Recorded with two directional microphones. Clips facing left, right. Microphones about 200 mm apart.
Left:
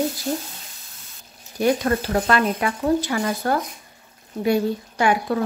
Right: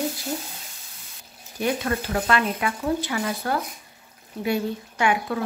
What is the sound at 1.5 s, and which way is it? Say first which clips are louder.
Speech: left 5 dB; 40° left (ahead or behind).